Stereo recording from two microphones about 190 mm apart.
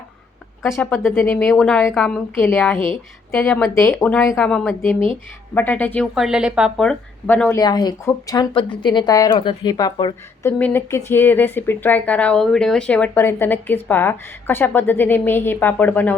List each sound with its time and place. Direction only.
0.6 s speech: 10° left (ahead or behind)
2.7 s speech: 25° right (ahead or behind)
3.3 s speech: centre (ahead or behind)
7.6 s speech: 20° left (ahead or behind)
10.4 s speech: 10° left (ahead or behind)